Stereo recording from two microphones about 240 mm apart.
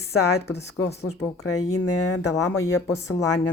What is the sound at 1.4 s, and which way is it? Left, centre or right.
Speech, left.